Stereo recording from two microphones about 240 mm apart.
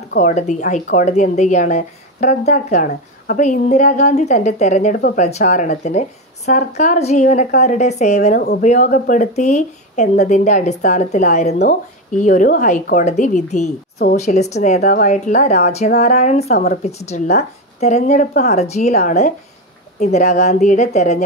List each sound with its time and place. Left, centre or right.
0.1 s a woman's voice: left